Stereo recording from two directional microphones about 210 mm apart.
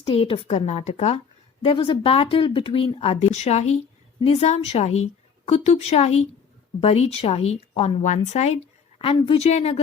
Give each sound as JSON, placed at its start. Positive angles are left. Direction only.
{"t": 0.0, "sound": "a woman's voice", "side_deg": 25}